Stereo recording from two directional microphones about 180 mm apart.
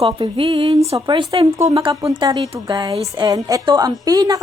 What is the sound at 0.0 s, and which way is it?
A woman's voice, 30° right (ahead or behind).